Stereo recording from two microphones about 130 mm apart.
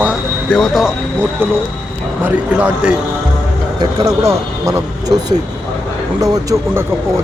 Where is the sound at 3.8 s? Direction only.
30° right (ahead or behind).